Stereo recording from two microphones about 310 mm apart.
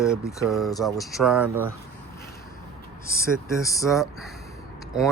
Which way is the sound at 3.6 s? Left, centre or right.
Centre.